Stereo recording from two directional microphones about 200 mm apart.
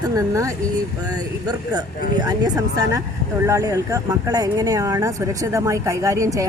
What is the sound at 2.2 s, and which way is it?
A woman's voice, 20° right (ahead or behind).